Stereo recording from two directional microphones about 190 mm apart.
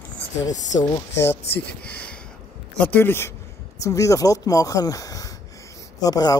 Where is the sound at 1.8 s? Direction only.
5° left (ahead or behind).